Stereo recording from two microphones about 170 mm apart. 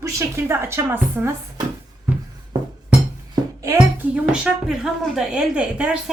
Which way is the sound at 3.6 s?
20° right (ahead or behind).